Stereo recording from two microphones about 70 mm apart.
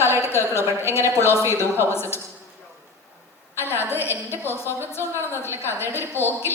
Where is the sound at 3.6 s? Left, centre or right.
Left.